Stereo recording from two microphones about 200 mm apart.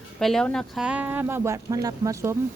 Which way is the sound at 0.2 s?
Centre (ahead or behind).